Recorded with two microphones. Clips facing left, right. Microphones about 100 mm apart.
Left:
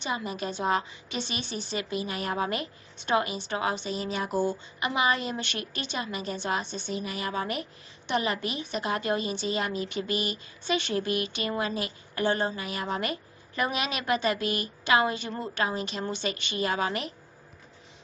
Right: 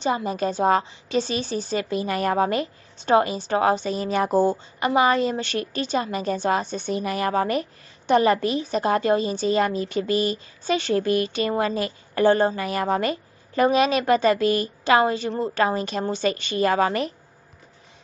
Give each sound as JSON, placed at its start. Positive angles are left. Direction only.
{"t": 0.0, "sound": "a woman's voice", "side_deg": -35}
{"t": 13.0, "sound": "a woman's voice", "side_deg": -35}
{"t": 15.5, "sound": "a woman's voice", "side_deg": -40}